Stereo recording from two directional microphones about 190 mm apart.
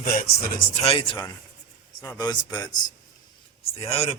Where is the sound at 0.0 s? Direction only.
50° left (ahead or behind).